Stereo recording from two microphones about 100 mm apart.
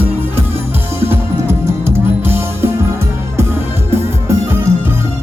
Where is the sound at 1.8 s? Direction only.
25° right (ahead or behind).